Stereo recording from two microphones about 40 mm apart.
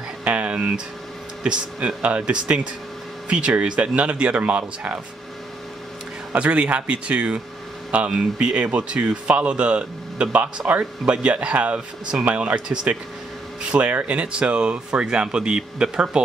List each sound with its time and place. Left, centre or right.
0.2 s a sound: right
0.6 s speech: right
4.4 s speech: right
6.3 s speech: right